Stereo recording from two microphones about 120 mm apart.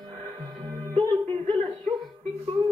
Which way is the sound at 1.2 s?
45° right (ahead or behind).